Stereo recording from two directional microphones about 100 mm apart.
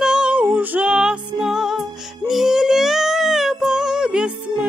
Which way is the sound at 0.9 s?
5° right (ahead or behind).